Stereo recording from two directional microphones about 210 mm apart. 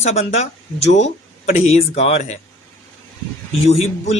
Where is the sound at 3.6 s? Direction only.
30° left (ahead or behind).